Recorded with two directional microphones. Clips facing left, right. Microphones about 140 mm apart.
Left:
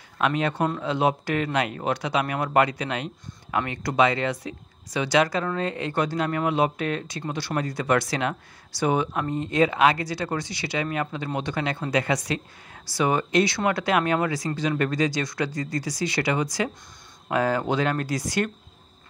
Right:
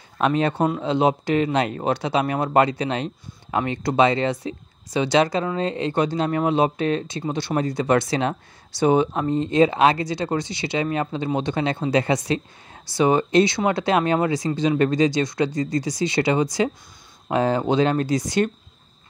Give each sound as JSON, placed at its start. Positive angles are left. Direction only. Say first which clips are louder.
{"t": 0.2, "sound": "speech", "louder": "right 4 dB", "side_deg": -30}